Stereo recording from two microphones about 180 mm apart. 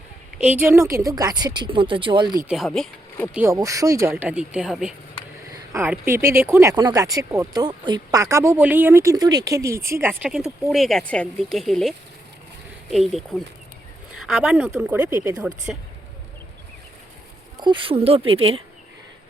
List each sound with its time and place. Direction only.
0.3 s speech: 10° right (ahead or behind); by 2.3 s 25° right (ahead or behind)
2.4 s speech: 5° right (ahead or behind)
3.3 s speech: 15° right (ahead or behind)
15.1 s speech: 20° right (ahead or behind)
17.6 s speech: 25° right (ahead or behind)